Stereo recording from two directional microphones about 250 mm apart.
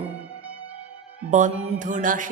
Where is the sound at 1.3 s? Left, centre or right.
Right.